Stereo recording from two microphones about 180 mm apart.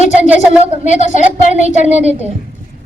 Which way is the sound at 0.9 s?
45° left (ahead or behind).